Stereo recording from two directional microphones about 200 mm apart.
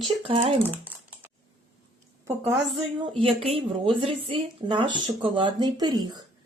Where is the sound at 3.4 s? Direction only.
30° right (ahead or behind).